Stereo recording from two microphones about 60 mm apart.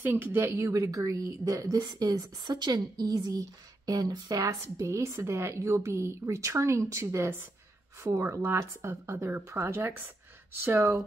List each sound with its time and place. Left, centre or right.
0.0 s speech: right
0.6 s speech: right
0.9 s speech: right
4.5 s a woman's voice: right